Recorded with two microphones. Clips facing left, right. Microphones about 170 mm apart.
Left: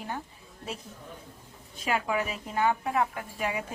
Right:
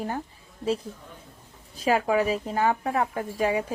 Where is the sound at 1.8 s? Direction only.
35° right (ahead or behind).